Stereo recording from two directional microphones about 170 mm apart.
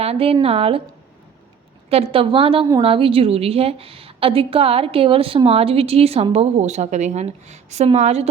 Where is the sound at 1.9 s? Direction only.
35° right (ahead or behind).